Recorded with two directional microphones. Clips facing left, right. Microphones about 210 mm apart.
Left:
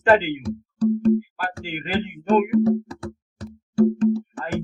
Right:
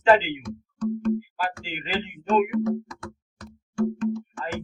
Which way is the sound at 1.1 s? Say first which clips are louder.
Left 4 dB; 50° left (ahead or behind).